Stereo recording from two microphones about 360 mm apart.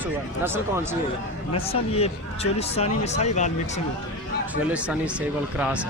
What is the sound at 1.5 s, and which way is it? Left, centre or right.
Speech, centre.